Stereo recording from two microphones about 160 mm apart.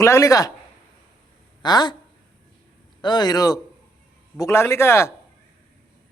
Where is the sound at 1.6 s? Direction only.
25° left (ahead or behind).